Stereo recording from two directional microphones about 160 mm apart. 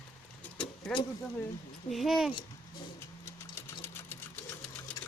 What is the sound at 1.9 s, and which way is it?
Speech, centre (ahead or behind).